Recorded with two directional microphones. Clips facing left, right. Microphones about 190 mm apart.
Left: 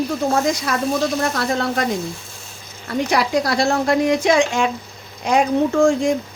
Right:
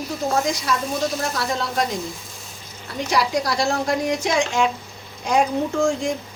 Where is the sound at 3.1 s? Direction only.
60° left (ahead or behind).